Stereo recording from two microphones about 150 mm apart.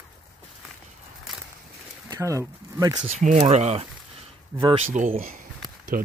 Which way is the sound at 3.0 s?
50° right (ahead or behind).